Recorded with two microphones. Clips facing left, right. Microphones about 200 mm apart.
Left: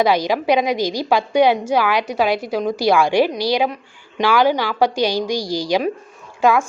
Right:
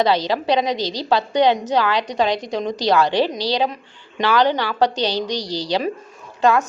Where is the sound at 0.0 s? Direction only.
10° left (ahead or behind).